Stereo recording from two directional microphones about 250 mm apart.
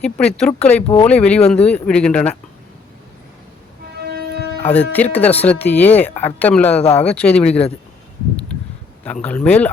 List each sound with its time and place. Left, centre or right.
0.0 s speech: centre
3.9 s train: right
4.6 s speech: centre
9.0 s speech: centre